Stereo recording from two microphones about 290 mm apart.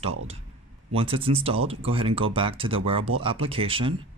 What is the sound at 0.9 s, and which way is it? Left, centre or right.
Speech, centre.